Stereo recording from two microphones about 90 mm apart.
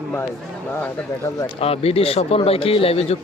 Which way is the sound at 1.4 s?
90° left.